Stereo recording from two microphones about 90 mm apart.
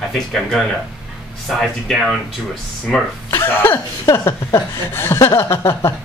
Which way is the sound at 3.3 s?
25° left (ahead or behind).